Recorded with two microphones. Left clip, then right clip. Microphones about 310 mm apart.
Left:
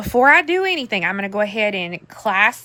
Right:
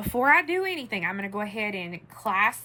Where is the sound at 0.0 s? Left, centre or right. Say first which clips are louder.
Left 8 dB; centre.